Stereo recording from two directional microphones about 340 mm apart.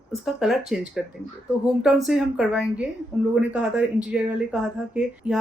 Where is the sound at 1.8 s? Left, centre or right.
Centre.